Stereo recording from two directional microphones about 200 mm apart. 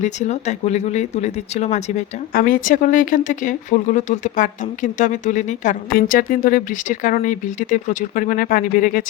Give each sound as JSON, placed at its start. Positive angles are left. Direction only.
{"t": 0.0, "sound": "speech", "side_deg": 35}
{"t": 2.3, "sound": "speech", "side_deg": 45}